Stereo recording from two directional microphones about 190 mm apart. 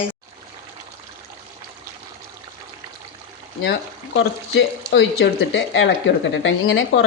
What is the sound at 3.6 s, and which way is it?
Speech, 65° left (ahead or behind).